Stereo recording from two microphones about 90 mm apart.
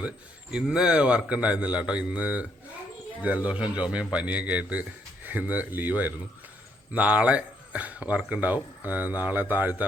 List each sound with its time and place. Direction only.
0.5 s speech: 10° right (ahead or behind)